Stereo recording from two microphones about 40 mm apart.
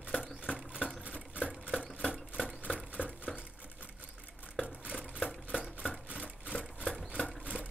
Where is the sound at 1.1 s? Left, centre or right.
Right.